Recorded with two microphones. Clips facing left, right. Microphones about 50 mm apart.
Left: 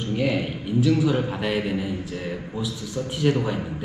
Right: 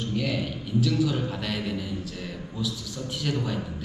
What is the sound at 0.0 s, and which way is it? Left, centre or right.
A man's voice, centre.